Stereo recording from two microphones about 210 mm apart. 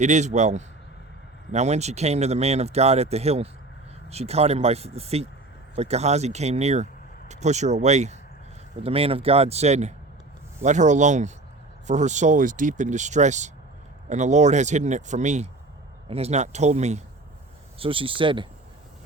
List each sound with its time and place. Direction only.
0.0 s speech: 35° right (ahead or behind)